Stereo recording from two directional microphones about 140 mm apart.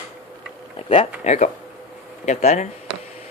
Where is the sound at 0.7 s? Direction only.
45° left (ahead or behind).